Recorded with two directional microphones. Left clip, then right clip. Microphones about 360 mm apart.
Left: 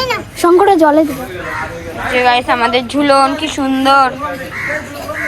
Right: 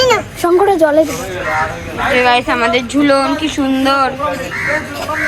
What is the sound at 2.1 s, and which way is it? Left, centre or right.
A woman's voice, centre.